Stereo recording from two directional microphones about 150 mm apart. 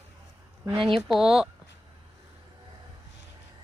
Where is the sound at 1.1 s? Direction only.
5° right (ahead or behind).